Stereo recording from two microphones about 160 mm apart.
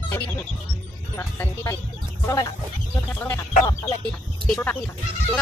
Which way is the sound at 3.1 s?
15° left (ahead or behind).